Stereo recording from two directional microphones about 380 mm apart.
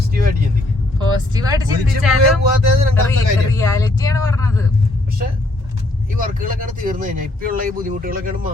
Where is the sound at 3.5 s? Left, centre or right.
Centre.